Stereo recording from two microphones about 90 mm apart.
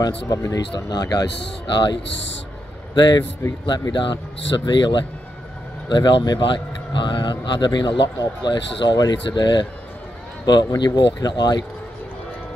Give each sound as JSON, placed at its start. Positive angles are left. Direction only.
{"t": 0.0, "sound": "speech", "side_deg": 40}